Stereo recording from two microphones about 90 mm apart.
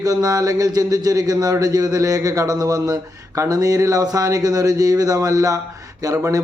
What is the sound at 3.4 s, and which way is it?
A man's voice, 40° right (ahead or behind).